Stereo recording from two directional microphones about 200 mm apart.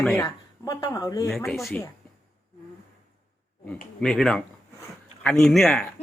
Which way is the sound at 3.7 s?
5° left (ahead or behind).